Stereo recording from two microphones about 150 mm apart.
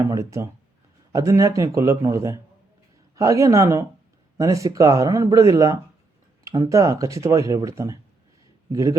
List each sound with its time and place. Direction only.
0.1 s speech: 20° right (ahead or behind)